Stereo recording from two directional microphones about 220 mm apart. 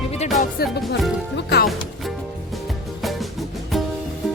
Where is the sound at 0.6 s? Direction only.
45° left (ahead or behind).